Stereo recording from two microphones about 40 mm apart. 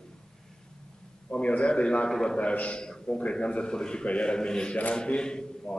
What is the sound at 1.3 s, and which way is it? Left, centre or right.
Speech, left.